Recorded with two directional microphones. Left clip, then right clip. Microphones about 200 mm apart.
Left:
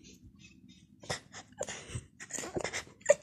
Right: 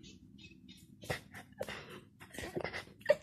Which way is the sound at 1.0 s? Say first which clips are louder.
Left 2 dB; 5° right (ahead or behind).